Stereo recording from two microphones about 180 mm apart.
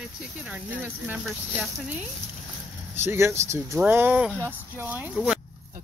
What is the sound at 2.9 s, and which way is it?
Speech, 15° right (ahead or behind).